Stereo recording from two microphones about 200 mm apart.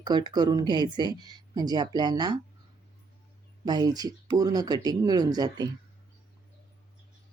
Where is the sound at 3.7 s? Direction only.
20° right (ahead or behind).